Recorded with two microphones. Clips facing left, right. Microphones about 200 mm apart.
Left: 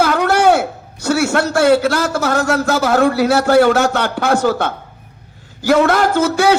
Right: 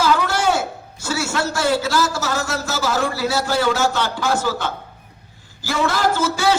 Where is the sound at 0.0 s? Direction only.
60° left (ahead or behind).